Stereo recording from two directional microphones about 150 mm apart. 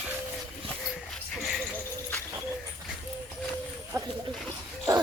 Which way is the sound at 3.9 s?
20° right (ahead or behind).